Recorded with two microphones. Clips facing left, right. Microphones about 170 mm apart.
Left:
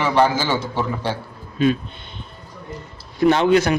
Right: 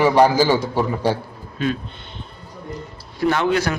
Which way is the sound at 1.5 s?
20° left (ahead or behind).